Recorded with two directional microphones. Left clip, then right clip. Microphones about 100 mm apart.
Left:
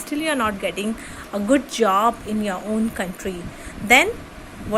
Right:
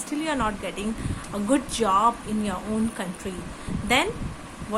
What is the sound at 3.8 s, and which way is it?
Speech, 50° left (ahead or behind).